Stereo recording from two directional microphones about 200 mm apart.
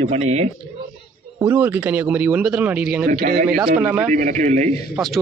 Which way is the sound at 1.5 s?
10° right (ahead or behind).